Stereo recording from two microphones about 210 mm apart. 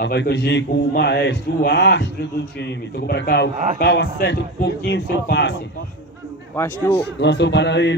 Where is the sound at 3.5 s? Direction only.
35° right (ahead or behind).